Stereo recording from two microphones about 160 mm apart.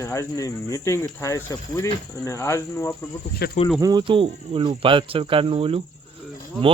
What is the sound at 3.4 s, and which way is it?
Speech, 80° left.